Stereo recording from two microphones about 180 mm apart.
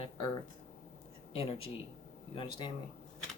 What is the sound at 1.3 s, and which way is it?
Speech, 30° left (ahead or behind).